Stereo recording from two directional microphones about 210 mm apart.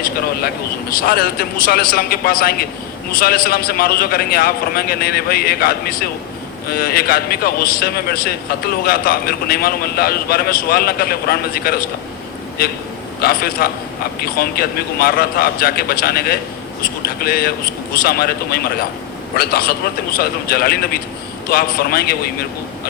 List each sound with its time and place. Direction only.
0.4 s a man's voice: 45° left (ahead or behind)
13.2 s a man's voice: 45° left (ahead or behind)